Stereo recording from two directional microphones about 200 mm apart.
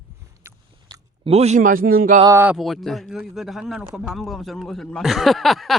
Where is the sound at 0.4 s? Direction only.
20° right (ahead or behind); by 2.2 s 45° right (ahead or behind).